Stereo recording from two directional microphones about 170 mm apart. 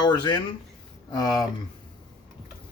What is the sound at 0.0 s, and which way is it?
Speech, 25° left (ahead or behind).